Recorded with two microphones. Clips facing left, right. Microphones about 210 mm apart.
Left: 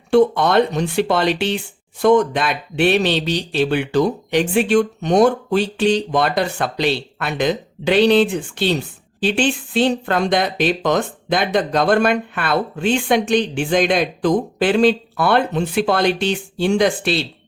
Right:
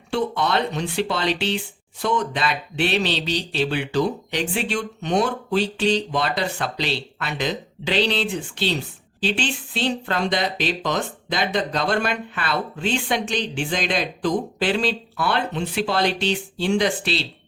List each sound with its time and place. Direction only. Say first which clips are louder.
0.1 s speech: left 8 dB; 50° left (ahead or behind)